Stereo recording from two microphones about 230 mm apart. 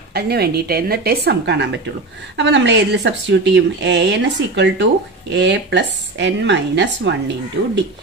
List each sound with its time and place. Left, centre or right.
0.1 s a woman's voice: right